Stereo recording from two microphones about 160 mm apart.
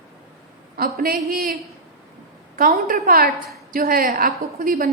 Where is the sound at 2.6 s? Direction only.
60° right (ahead or behind).